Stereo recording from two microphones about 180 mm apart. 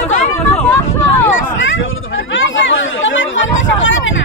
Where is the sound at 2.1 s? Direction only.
90° left.